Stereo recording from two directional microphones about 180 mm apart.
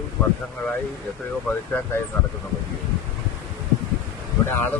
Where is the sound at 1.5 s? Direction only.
10° left (ahead or behind).